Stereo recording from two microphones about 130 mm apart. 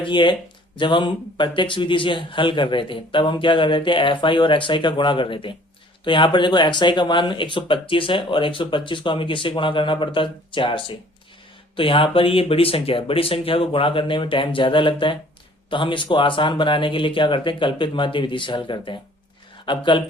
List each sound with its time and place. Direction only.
0.0 s speech: 40° left (ahead or behind)